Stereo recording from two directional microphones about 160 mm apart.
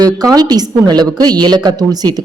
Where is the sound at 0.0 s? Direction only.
25° right (ahead or behind).